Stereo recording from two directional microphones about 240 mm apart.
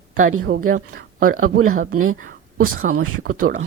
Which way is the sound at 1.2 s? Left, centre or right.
Right.